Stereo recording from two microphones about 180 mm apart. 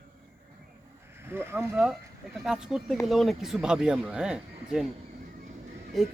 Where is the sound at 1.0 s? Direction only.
15° right (ahead or behind).